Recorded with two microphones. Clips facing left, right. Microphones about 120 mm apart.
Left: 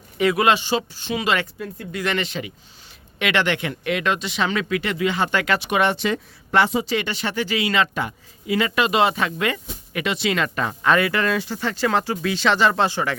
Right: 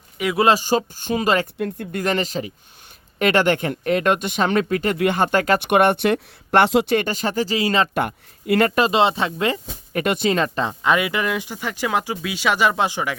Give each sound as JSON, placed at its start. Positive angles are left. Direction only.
{"t": 0.3, "sound": "speech", "side_deg": -35}
{"t": 1.5, "sound": "speech", "side_deg": -55}
{"t": 5.5, "sound": "speech", "side_deg": -60}
{"t": 6.9, "sound": "speech", "side_deg": -45}
{"t": 7.9, "sound": "speech", "side_deg": -55}
{"t": 8.8, "sound": "speech", "side_deg": -30}
{"t": 10.0, "sound": "speech", "side_deg": -45}